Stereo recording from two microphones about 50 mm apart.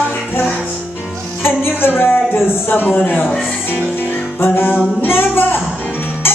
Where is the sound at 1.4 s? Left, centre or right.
Left.